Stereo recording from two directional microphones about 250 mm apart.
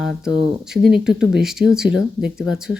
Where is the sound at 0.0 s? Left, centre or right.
Centre.